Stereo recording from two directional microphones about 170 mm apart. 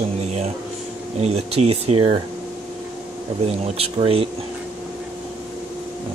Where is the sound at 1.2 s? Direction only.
35° right (ahead or behind).